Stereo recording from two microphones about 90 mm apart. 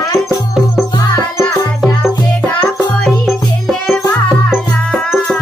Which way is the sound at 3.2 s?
Centre (ahead or behind).